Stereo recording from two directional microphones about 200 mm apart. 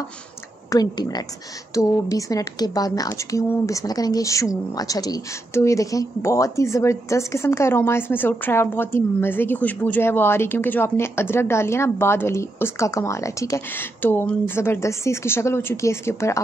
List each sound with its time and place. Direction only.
0.7 s speech: 20° left (ahead or behind)